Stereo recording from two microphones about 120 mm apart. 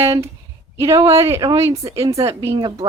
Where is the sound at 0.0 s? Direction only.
20° right (ahead or behind).